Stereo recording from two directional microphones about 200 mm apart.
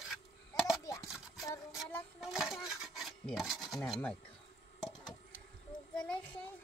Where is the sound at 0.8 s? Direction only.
15° left (ahead or behind).